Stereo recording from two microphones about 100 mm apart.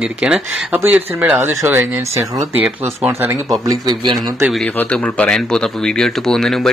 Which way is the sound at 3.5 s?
40° right (ahead or behind).